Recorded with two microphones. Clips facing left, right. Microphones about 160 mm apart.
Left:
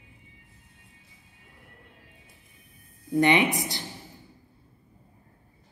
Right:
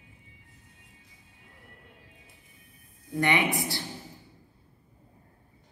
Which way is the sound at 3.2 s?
20° left (ahead or behind).